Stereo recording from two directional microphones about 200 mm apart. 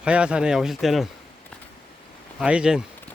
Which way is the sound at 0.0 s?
5° right (ahead or behind).